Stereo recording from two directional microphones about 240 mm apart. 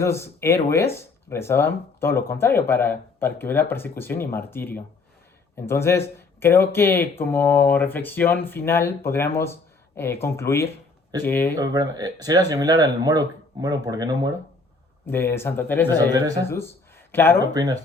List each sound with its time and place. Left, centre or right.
0.0 s speech: centre
11.5 s speech: centre
15.0 s speech: centre
16.1 s speech: centre
16.4 s speech: centre
17.5 s speech: centre